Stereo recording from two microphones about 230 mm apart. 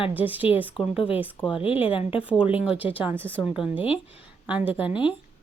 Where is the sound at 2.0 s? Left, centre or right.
Left.